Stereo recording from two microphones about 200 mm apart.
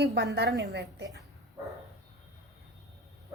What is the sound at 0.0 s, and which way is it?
A woman's voice, 60° right (ahead or behind).